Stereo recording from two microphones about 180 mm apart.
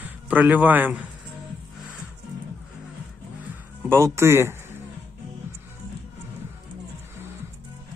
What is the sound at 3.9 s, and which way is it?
Speech, 15° right (ahead or behind).